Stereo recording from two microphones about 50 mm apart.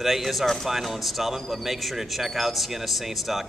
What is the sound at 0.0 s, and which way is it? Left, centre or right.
Speech, centre.